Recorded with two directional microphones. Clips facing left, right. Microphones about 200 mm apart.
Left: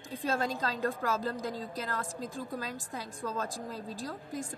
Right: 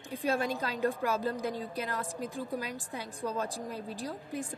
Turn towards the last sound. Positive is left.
turn(degrees=-15)  # may be behind; listen again after turning